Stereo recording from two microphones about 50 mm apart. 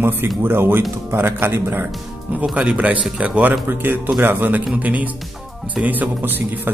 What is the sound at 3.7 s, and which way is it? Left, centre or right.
Speech, right.